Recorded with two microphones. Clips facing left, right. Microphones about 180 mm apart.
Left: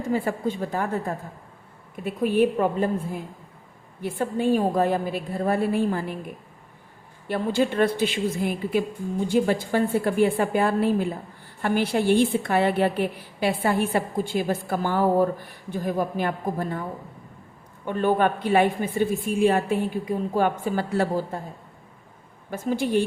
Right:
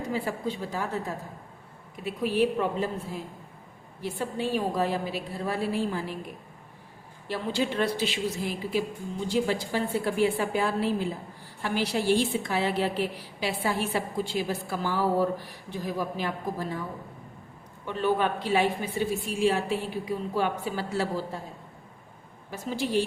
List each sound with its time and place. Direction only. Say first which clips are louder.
0.1 s a woman's voice: left 7 dB; 50° left (ahead or behind)
7.3 s a woman's voice: left 5 dB; 50° left (ahead or behind)
17.8 s a woman's voice: left 4 dB; 50° left (ahead or behind)
22.4 s a woman's voice: left 6 dB; 50° left (ahead or behind)